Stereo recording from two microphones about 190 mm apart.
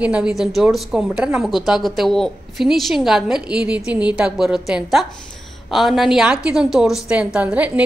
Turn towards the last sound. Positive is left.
turn(degrees=-5)  # may be behind; listen again after turning